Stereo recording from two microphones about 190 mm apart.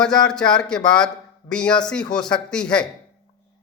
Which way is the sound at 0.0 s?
5° left (ahead or behind).